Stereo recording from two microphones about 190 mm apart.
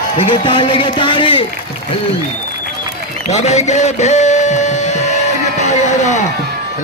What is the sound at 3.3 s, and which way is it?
Music, 35° left (ahead or behind).